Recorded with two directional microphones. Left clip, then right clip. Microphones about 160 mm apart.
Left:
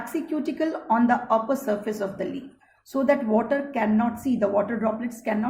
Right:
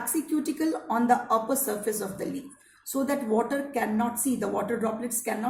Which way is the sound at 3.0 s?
35° left (ahead or behind).